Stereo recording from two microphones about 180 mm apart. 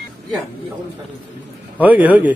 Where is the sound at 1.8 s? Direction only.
10° right (ahead or behind).